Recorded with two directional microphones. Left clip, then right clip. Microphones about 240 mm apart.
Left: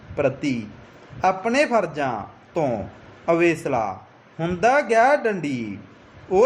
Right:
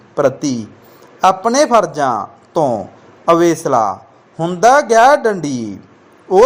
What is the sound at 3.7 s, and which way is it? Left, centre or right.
Speech, centre.